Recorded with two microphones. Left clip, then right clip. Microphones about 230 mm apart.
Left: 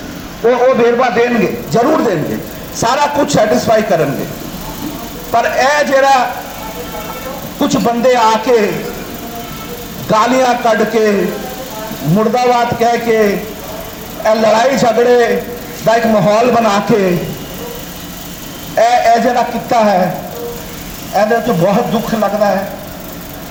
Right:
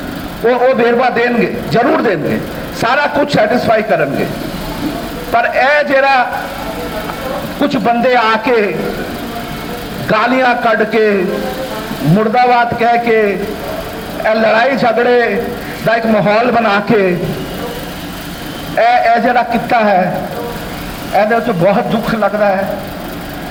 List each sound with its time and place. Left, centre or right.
0.4 s a man's voice: left
1.7 s a man's voice: left
5.3 s a man's voice: left
7.6 s a man's voice: left
10.1 s a man's voice: left
12.1 s a man's voice: left
14.3 s a man's voice: left
18.8 s a man's voice: left
21.2 s a man's voice: left